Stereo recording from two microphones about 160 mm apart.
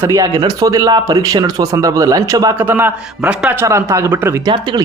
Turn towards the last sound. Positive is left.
turn(degrees=-30)  # may be behind; listen again after turning